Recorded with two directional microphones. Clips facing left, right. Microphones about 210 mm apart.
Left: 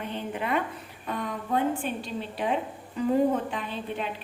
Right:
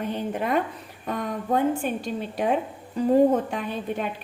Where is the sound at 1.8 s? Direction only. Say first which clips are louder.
Right 4 dB; 50° right (ahead or behind).